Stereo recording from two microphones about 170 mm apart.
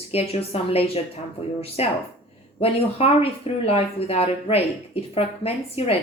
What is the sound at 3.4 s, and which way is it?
A woman's voice, 35° left (ahead or behind).